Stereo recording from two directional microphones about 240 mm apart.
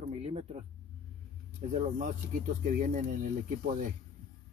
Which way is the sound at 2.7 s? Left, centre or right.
Right.